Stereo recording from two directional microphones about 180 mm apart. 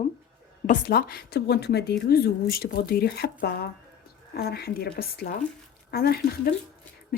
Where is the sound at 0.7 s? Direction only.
55° left (ahead or behind).